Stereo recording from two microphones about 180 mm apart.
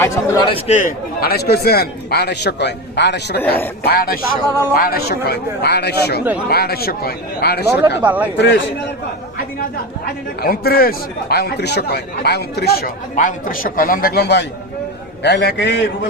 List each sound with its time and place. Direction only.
0.0 s a man's voice: 15° left (ahead or behind)
0.5 s a man's voice: 45° left (ahead or behind); by 3.4 s 70° left (ahead or behind)
3.8 s a man's voice: 55° left (ahead or behind)
7.8 s speech: 10° right (ahead or behind)
8.4 s speech: 80° left
10.4 s a man's voice: 60° left (ahead or behind); by 15.7 s 75° left (ahead or behind)